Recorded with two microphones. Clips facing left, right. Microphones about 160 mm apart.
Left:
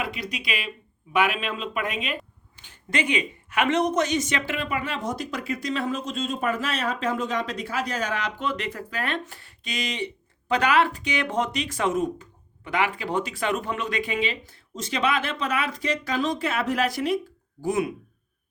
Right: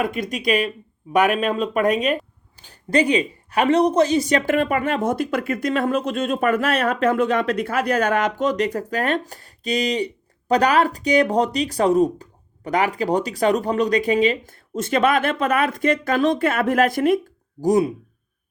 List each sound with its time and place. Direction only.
0.0 s speech: 50° right (ahead or behind)
17.6 s speech: 35° right (ahead or behind)